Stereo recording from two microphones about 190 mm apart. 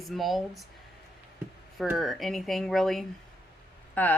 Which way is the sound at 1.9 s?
Centre (ahead or behind).